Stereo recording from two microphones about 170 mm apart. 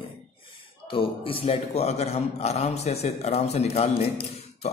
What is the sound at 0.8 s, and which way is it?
A man's voice, 30° left (ahead or behind).